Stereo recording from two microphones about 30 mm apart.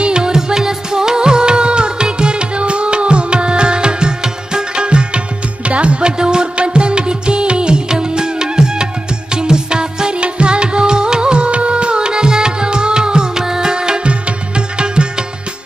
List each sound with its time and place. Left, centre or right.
0.0 s music: right
4.8 s music: right
6.1 s music: right
10.1 s music: right